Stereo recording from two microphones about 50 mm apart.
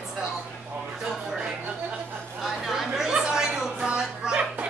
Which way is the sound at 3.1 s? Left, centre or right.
Centre.